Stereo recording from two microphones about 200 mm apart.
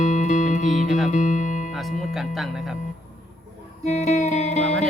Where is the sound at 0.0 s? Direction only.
35° left (ahead or behind).